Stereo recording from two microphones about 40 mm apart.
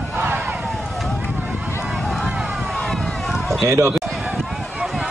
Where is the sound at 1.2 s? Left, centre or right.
Right.